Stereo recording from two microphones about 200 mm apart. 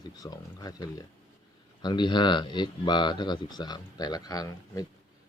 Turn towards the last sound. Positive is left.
turn(degrees=20)  # may be behind; listen again after turning